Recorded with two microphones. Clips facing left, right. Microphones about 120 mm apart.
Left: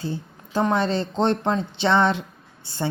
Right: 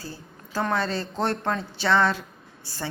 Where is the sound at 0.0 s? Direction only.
25° left (ahead or behind).